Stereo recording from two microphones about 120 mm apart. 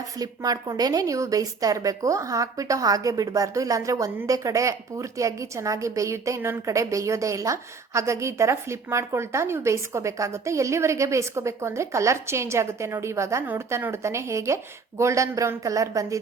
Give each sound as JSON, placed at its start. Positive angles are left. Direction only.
{"t": 0.2, "sound": "a woman's voice", "side_deg": -30}